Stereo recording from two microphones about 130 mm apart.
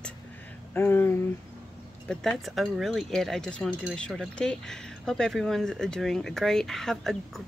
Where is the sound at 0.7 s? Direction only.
15° left (ahead or behind).